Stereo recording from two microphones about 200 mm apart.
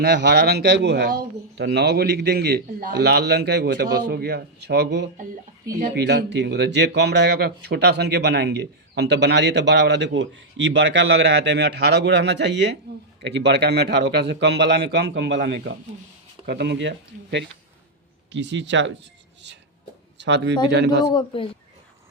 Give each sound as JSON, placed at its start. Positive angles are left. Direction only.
{"t": 0.0, "sound": "a man's voice", "side_deg": -60}
{"t": 18.3, "sound": "a man's voice", "side_deg": -65}
{"t": 20.1, "sound": "a man's voice", "side_deg": -65}
{"t": 21.0, "sound": "speech", "side_deg": 20}